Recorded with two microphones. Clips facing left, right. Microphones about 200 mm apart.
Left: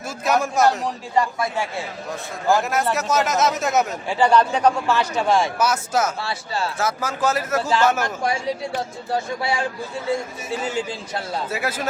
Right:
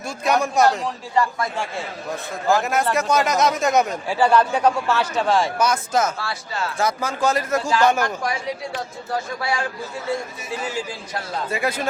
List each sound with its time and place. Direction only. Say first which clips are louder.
0.3 s speech: right 1 dB; 5° left (ahead or behind)
2.5 s speech: even; centre (ahead or behind)
5.2 s speech: even; 5° left (ahead or behind)
6.1 s speech: left 2 dB; 30° left (ahead or behind)
6.7 s speech: right 1 dB; 5° left (ahead or behind)
9.4 s speech: left 1 dB; 25° left (ahead or behind)
11.4 s speech: right 2 dB; 5° left (ahead or behind)